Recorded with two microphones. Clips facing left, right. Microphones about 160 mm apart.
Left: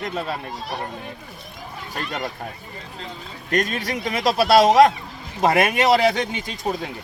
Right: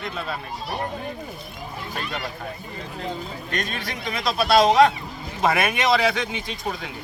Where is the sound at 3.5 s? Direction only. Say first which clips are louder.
Left 8 dB; 40° left (ahead or behind).